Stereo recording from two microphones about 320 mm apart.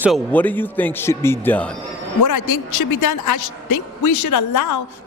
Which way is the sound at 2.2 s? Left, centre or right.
Left.